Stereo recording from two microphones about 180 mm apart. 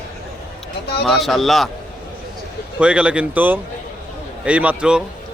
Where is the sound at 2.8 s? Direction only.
5° right (ahead or behind).